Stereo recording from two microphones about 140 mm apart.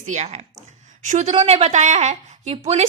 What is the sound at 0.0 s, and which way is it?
A woman's voice, 55° right (ahead or behind).